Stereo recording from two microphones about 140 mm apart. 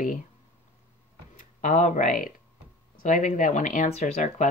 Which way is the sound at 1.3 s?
70° left (ahead or behind).